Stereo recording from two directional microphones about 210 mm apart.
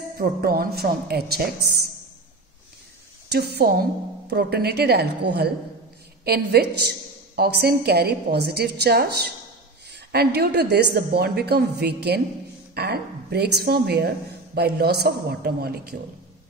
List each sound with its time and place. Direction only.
0.2 s a woman's voice: 45° right (ahead or behind)
3.3 s a woman's voice: 50° right (ahead or behind)